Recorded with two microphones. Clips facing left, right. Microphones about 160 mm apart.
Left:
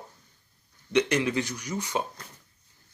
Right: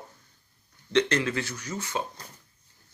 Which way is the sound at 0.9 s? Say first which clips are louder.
Left 1 dB; 15° left (ahead or behind).